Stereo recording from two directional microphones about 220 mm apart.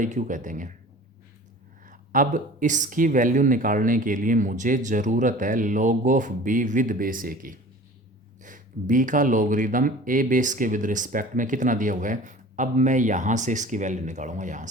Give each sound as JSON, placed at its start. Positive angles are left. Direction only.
{"t": 0.0, "sound": "speech", "side_deg": -35}
{"t": 1.9, "sound": "speech", "side_deg": -35}